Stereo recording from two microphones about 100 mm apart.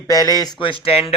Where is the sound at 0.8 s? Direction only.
75° left (ahead or behind).